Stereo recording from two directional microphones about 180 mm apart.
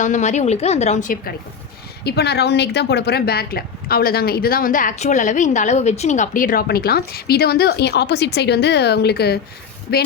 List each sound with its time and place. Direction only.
0.0 s a woman's voice: 40° left (ahead or behind)
2.0 s a woman's voice: 65° left (ahead or behind)